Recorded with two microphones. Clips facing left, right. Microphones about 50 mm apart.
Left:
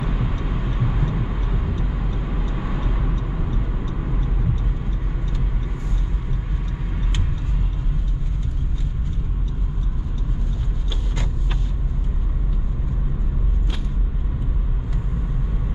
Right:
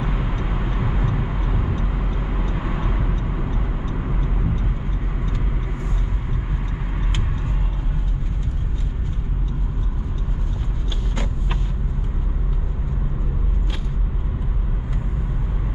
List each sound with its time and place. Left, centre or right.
0.4 s vehicle: right